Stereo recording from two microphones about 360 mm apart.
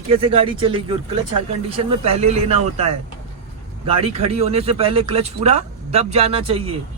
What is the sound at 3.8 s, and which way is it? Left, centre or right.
Speech, centre.